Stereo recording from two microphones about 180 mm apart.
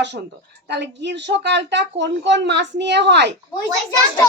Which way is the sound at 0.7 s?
75° right (ahead or behind).